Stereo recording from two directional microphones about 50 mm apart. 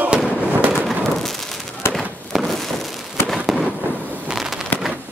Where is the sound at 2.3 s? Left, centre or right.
Centre.